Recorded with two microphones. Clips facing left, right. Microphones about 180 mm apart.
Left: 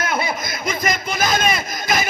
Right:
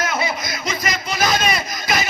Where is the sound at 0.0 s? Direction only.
55° left (ahead or behind).